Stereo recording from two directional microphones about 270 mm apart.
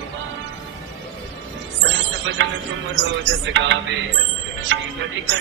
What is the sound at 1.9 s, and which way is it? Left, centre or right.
Music, right.